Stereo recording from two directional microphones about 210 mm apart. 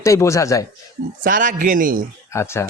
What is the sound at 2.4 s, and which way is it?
Speech, 15° left (ahead or behind).